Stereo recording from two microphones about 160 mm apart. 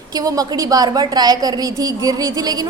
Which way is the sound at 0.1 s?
25° right (ahead or behind).